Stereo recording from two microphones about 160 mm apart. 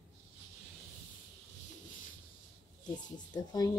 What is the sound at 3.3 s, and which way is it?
Speech, 25° left (ahead or behind).